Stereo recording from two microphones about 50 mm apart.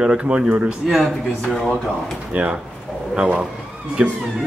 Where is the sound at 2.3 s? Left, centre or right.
Right.